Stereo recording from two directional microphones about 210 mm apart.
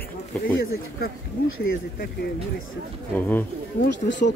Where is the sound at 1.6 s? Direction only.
45° left (ahead or behind).